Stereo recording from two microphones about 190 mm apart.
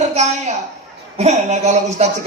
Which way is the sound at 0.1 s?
35° right (ahead or behind).